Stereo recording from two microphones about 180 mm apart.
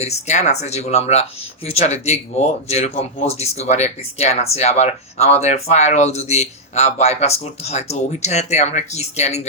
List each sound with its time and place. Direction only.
0.0 s speech: 40° left (ahead or behind)